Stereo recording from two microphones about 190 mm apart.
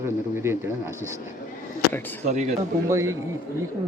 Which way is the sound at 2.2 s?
35° right (ahead or behind).